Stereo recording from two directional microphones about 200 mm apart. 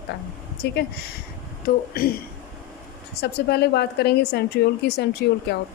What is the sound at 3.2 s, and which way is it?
A woman's voice, 55° left (ahead or behind).